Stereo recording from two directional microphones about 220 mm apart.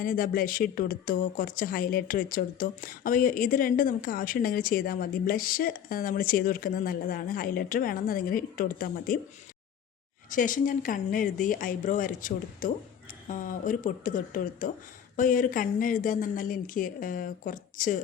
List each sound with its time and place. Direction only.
0.0 s speech: 40° left (ahead or behind)
10.2 s speech: 35° left (ahead or behind)